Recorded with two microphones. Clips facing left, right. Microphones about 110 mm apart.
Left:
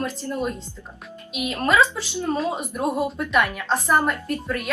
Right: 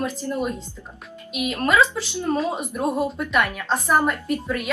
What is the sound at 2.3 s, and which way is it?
A woman's voice, centre (ahead or behind).